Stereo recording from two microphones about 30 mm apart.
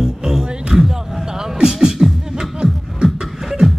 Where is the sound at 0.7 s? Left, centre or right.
Right.